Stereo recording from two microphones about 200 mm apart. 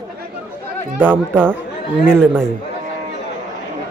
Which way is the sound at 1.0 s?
10° right (ahead or behind).